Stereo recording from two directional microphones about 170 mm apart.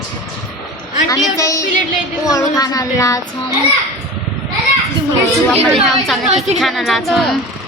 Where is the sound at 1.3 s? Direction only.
20° left (ahead or behind).